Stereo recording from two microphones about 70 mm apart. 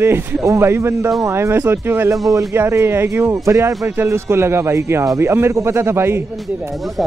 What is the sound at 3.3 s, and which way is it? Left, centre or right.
Speech, right.